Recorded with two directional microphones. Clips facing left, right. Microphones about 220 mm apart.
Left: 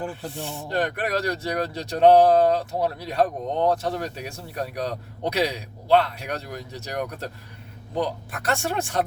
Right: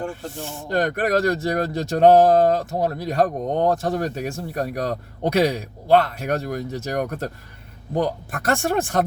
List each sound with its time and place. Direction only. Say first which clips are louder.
0.0 s speech: right 2 dB; centre (ahead or behind)
0.7 s speech: right 5 dB; 45° right (ahead or behind)